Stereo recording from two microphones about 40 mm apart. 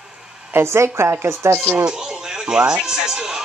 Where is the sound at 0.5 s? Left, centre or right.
Right.